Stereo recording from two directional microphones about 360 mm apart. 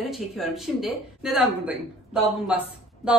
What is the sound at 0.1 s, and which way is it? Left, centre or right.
Speech, centre.